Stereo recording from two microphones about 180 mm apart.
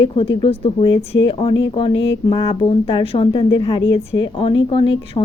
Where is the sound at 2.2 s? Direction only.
30° left (ahead or behind).